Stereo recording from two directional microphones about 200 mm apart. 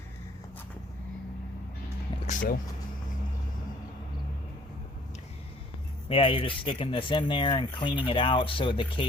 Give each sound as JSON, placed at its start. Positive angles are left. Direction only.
{"t": 2.2, "sound": "vehicle", "side_deg": 40}
{"t": 6.1, "sound": "speech", "side_deg": 25}